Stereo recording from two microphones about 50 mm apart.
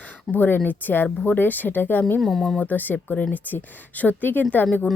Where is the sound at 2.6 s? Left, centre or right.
Left.